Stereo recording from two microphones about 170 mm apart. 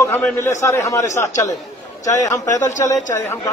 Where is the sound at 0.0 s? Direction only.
15° left (ahead or behind).